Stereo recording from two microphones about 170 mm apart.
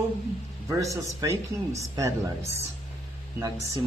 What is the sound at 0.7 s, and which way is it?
A man's voice, 20° right (ahead or behind).